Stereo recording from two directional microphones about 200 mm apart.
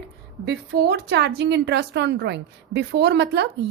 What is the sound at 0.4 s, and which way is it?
A woman's voice, 55° right (ahead or behind).